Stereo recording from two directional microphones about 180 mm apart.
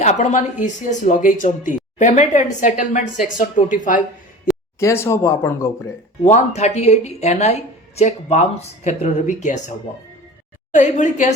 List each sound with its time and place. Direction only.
0.0 s speech: 40° left (ahead or behind)
4.8 s speech: 15° left (ahead or behind)
6.2 s speech: 40° left (ahead or behind)